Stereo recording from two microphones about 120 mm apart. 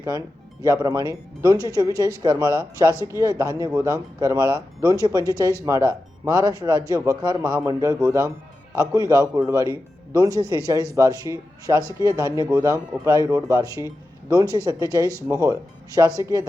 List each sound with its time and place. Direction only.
0.0 s speech: 30° right (ahead or behind)
10.4 s speech: 25° left (ahead or behind)
10.7 s speech: 25° right (ahead or behind)